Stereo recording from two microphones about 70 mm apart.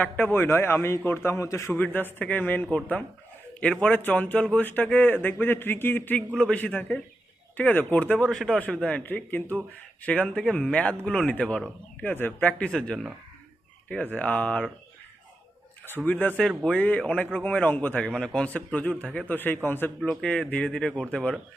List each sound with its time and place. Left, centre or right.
0.0 s a man's voice: left
1.7 s a man's voice: left
6.3 s speech: centre
6.6 s a man's voice: centre
8.3 s speech: centre
9.0 s a man's voice: left
12.0 s speech: left; by 13.1 s centre
13.9 s a man's voice: left
16.0 s a man's voice: left
19.3 s a man's voice: left
20.5 s speech: centre